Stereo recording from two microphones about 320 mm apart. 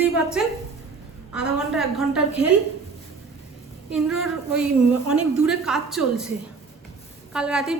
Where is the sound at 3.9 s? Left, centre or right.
Centre.